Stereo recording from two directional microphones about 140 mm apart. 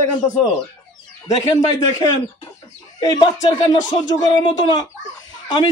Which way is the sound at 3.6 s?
30° left (ahead or behind).